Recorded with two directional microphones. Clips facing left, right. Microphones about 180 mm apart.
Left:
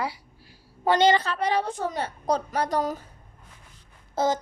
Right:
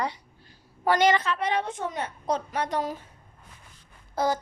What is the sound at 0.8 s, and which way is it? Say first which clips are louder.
A woman's voice: left 2 dB; 25° left (ahead or behind).